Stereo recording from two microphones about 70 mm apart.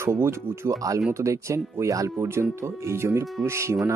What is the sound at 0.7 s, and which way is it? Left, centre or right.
Speech, right.